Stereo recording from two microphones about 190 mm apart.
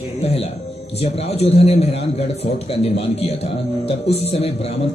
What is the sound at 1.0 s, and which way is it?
A man's voice, 35° left (ahead or behind).